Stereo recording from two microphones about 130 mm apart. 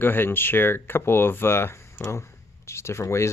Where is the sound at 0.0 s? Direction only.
15° left (ahead or behind).